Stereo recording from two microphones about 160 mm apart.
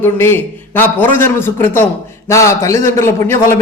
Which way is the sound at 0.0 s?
15° left (ahead or behind).